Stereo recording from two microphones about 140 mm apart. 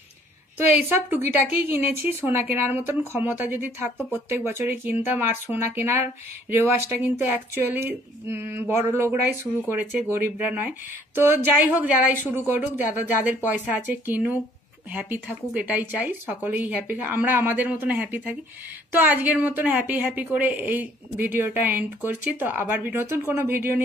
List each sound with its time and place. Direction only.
0.6 s a woman's voice: 15° right (ahead or behind)